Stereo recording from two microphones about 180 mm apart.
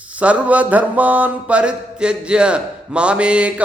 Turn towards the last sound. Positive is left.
turn(degrees=-5)  # may be behind; listen again after turning